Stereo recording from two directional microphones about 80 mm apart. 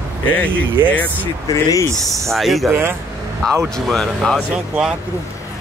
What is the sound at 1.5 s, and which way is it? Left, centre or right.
Speech, left.